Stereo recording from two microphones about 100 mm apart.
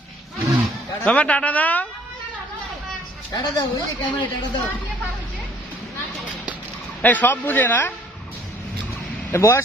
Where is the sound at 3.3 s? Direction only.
40° left (ahead or behind).